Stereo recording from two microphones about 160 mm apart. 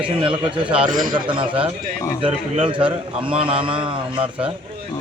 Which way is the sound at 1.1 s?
30° right (ahead or behind).